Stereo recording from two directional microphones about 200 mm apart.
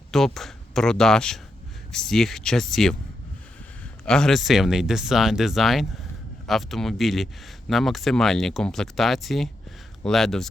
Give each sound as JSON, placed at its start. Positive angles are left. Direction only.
{"t": 0.3, "sound": "speech", "side_deg": 0}
{"t": 4.0, "sound": "speech", "side_deg": 5}